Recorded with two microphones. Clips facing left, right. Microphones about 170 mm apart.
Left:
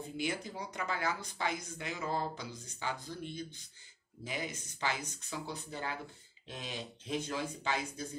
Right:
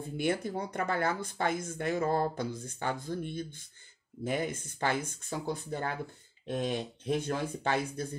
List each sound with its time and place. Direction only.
0.2 s speech: 55° right (ahead or behind)